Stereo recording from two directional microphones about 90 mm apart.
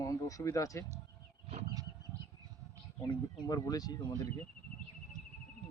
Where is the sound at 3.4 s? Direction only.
45° left (ahead or behind).